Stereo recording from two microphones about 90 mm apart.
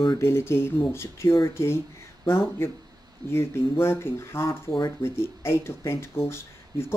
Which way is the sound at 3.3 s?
30° left (ahead or behind).